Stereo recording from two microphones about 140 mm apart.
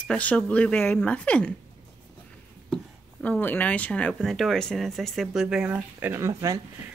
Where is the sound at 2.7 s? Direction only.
10° left (ahead or behind).